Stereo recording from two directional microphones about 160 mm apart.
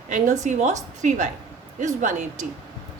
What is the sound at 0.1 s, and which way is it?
A woman's voice, 50° right (ahead or behind).